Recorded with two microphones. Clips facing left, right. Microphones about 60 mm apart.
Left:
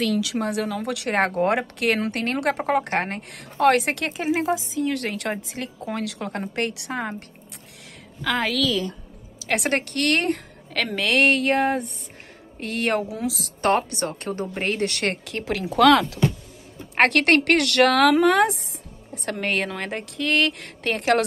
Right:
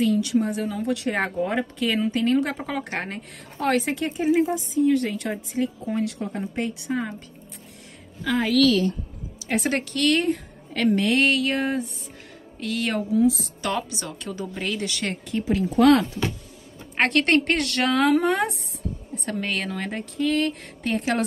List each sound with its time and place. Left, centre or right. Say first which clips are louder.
0.0 s speech: right 2 dB; left
1.1 s speech: left 4 dB; left
7.0 s a woman's voice: left 1 dB; left
8.2 s a woman's voice: even; left
9.5 s speech: left 1 dB; left
9.8 s speech: right 1 dB; left
11.1 s a sound: left 3 dB; left
13.1 s speech: right 8 dB; left
13.6 s a woman's voice: left 6 dB; left
16.9 s a woman's voice: left 2 dB; left
19.4 s a woman's voice: left 5 dB; left